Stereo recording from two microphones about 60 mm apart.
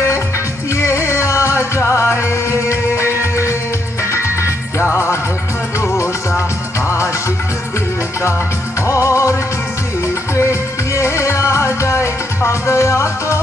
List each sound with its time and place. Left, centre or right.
0.7 s music: left
8.8 s music: left